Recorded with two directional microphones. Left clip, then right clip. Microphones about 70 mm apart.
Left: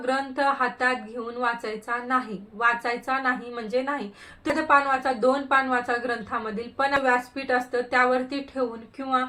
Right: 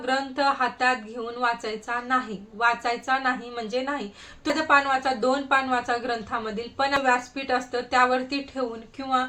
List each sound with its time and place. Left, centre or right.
0.0 s a woman's voice: centre